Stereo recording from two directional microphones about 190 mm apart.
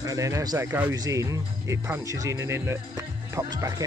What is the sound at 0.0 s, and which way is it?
Speech, 15° right (ahead or behind).